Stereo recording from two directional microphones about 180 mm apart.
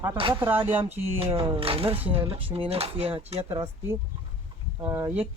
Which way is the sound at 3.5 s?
15° right (ahead or behind).